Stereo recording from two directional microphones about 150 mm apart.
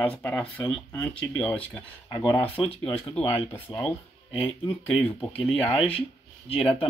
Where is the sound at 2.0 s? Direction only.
20° left (ahead or behind).